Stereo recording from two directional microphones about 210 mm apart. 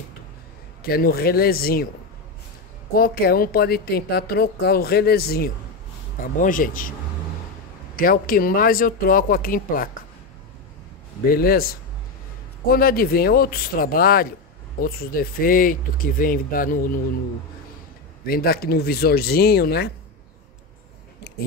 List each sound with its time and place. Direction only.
0.8 s a woman's voice: 45° left (ahead or behind)
2.9 s a woman's voice: 45° left (ahead or behind)
7.9 s a woman's voice: 45° left (ahead or behind)
11.2 s a woman's voice: 45° left (ahead or behind)
18.2 s a woman's voice: 45° left (ahead or behind)